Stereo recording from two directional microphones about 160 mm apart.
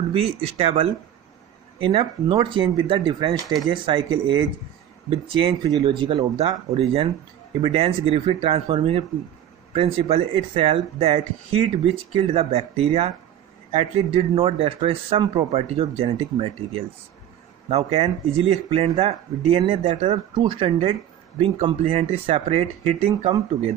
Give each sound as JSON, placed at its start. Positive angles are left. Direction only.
{"t": 0.1, "sound": "speech", "side_deg": -40}